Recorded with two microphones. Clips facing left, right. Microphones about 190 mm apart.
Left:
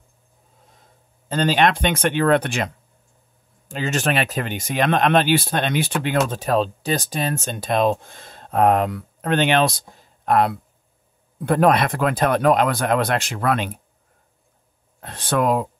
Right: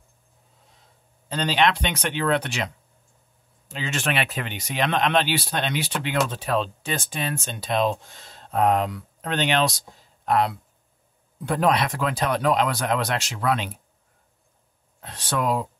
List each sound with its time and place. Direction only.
1.3 s speech: 50° left (ahead or behind)
15.0 s speech: 55° left (ahead or behind)